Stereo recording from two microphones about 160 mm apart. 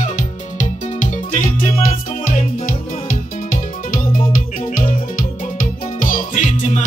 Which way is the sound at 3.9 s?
55° left (ahead or behind).